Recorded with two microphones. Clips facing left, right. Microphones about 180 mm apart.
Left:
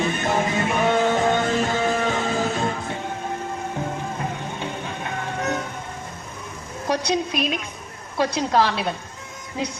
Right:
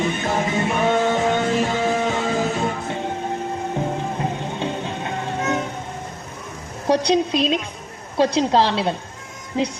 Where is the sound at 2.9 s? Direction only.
25° right (ahead or behind).